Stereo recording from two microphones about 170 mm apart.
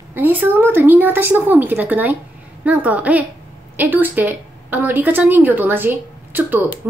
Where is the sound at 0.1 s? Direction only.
10° right (ahead or behind).